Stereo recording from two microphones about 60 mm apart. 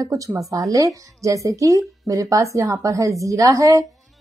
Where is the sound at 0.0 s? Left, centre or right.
Right.